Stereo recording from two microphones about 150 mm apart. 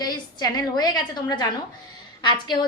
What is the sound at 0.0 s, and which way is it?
A woman's voice, 25° left (ahead or behind).